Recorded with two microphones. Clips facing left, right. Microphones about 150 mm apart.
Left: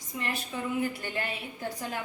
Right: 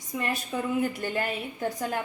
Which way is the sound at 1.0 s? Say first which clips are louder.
Right 5 dB; 45° right (ahead or behind).